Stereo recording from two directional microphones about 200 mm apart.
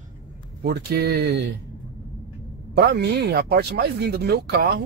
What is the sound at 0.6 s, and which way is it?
Speech, 50° right (ahead or behind).